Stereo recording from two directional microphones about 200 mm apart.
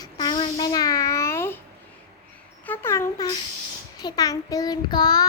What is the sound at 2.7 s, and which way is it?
A child's voice, 10° left (ahead or behind).